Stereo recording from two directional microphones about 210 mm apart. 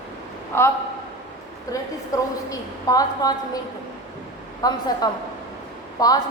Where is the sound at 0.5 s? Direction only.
10° left (ahead or behind).